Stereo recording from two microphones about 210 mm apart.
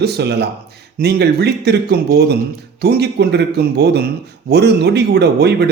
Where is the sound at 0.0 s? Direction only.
50° right (ahead or behind).